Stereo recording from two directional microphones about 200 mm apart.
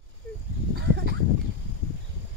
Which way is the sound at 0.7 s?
50° right (ahead or behind).